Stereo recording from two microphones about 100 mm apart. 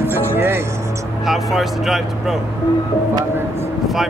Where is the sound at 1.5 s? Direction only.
Centre (ahead or behind).